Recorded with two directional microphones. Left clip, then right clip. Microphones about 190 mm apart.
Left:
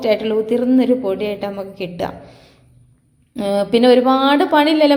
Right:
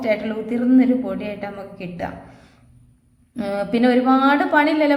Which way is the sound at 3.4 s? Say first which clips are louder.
Left 6 dB; 25° left (ahead or behind).